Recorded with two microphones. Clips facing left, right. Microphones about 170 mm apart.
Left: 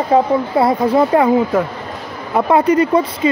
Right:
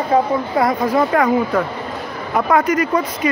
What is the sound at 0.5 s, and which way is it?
Speech, 30° left (ahead or behind).